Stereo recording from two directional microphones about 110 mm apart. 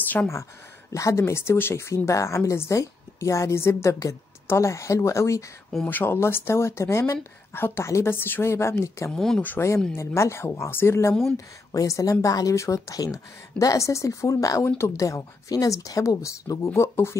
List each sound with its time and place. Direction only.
0.0 s a sound: 15° left (ahead or behind)
0.9 s speech: 30° left (ahead or behind)
9.1 s speech: 5° left (ahead or behind)
9.4 s a woman's voice: 20° left (ahead or behind)